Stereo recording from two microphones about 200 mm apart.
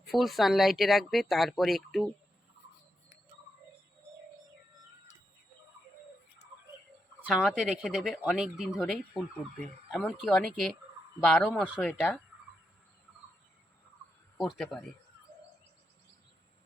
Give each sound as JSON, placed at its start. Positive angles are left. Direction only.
{"t": 0.1, "sound": "speech", "side_deg": 0}
{"t": 7.2, "sound": "speech", "side_deg": -5}
{"t": 14.3, "sound": "speech", "side_deg": 0}